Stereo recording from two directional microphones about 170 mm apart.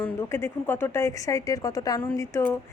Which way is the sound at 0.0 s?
15° left (ahead or behind).